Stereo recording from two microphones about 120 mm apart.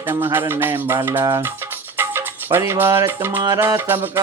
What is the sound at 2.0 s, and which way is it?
Music, 20° right (ahead or behind).